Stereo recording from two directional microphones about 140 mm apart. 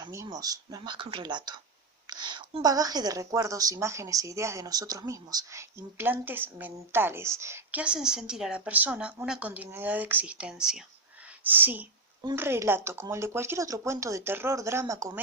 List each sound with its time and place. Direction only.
0.0 s a woman's voice: 25° right (ahead or behind)